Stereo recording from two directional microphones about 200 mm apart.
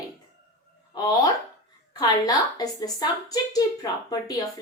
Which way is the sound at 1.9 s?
20° left (ahead or behind).